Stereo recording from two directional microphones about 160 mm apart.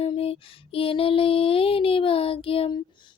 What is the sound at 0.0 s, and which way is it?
Female singing, 35° left (ahead or behind).